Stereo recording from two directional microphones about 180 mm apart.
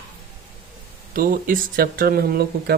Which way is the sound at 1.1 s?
50° right (ahead or behind).